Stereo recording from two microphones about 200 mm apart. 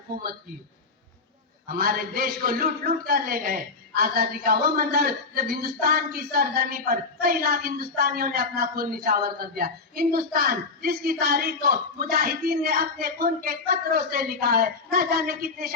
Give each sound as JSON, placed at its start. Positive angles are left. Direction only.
{"t": 1.6, "sound": "a man's voice", "side_deg": -50}